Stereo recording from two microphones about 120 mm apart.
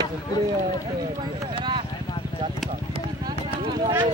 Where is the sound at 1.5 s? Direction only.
45° right (ahead or behind).